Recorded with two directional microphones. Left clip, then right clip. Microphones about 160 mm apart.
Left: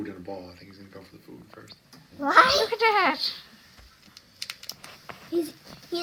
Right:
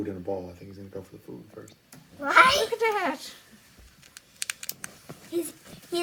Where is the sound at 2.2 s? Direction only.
5° left (ahead or behind).